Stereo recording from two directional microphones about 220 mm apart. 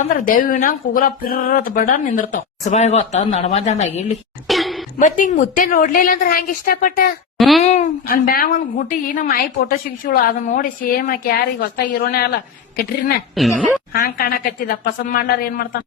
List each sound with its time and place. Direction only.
0.1 s a woman's voice: 40° left (ahead or behind)
4.4 s a sound: centre (ahead or behind)
4.9 s speech: 35° left (ahead or behind)
7.3 s a child's voice: centre (ahead or behind)
7.6 s speech: 35° left (ahead or behind)
13.3 s speech: centre (ahead or behind)
13.9 s speech: 45° left (ahead or behind)